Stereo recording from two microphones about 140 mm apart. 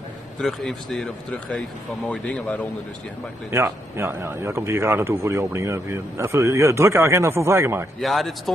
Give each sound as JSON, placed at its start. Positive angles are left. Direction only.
{"t": 0.4, "sound": "speech", "side_deg": 0}
{"t": 3.5, "sound": "a man's voice", "side_deg": -20}
{"t": 8.0, "sound": "speech", "side_deg": 0}